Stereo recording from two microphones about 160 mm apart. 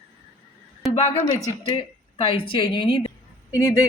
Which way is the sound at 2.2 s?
35° left (ahead or behind).